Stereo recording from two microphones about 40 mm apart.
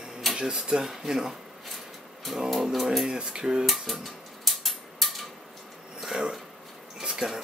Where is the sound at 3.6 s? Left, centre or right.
Centre.